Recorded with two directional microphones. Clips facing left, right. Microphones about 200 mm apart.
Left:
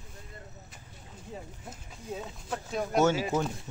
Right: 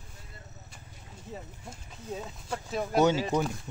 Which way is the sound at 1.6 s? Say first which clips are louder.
Right 1 dB; 5° left (ahead or behind).